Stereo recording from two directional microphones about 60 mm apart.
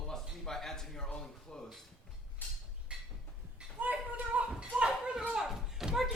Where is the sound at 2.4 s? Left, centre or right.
Left.